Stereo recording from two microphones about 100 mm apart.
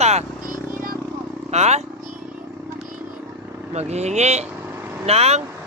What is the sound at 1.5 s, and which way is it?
Speech, 90° right.